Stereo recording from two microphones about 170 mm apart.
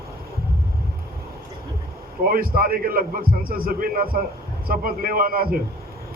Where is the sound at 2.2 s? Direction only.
60° right (ahead or behind).